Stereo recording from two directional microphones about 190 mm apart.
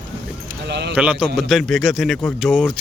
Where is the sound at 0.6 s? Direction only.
60° right (ahead or behind).